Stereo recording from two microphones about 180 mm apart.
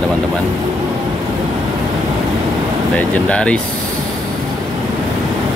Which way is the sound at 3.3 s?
5° left (ahead or behind).